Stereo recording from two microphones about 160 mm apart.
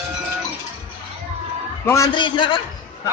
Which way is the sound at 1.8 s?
20° left (ahead or behind).